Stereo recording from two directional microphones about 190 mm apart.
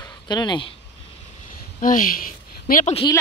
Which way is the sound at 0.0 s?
20° left (ahead or behind).